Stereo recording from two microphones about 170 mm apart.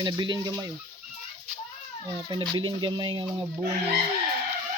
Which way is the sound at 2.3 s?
25° right (ahead or behind).